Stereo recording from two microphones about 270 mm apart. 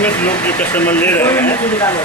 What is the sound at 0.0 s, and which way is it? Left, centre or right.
A man's voice, centre.